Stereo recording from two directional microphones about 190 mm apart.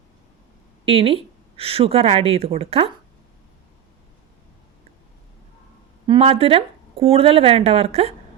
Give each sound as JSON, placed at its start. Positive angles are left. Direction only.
{"t": 0.9, "sound": "a woman's voice", "side_deg": -30}
{"t": 6.1, "sound": "a woman's voice", "side_deg": -30}